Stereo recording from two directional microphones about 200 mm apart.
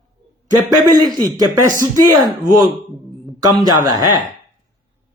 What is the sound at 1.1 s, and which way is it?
Speech, 20° right (ahead or behind).